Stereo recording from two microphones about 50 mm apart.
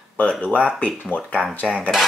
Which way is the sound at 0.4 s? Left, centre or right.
Left.